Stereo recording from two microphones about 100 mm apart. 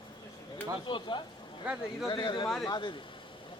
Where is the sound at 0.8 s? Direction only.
55° left (ahead or behind).